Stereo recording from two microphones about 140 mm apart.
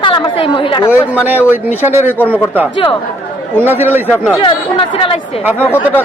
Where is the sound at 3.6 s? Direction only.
15° right (ahead or behind).